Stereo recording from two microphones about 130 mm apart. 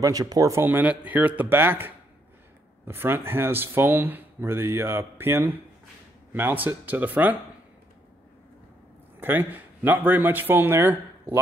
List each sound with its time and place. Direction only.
0.0 s speech: 30° right (ahead or behind); by 7.3 s 15° right (ahead or behind)
9.2 s speech: 15° right (ahead or behind)